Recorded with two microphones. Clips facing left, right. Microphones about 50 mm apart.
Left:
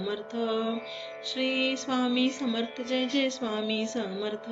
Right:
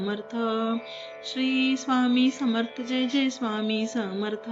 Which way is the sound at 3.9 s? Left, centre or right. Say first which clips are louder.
Right 3 dB; centre.